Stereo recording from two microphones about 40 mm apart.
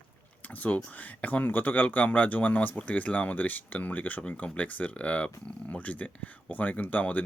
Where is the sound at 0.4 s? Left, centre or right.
Left.